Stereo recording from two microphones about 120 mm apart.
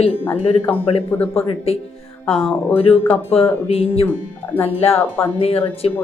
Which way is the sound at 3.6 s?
60° left (ahead or behind).